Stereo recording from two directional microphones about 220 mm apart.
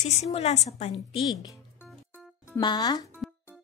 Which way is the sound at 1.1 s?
15° left (ahead or behind).